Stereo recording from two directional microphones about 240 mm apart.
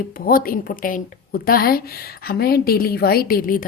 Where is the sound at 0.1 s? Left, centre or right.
Left.